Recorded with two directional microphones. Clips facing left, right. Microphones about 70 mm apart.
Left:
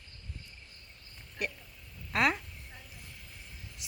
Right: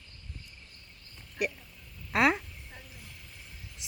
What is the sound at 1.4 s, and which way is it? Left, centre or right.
Speech, centre.